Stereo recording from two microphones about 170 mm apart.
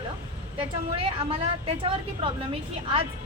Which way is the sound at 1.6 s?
35° right (ahead or behind).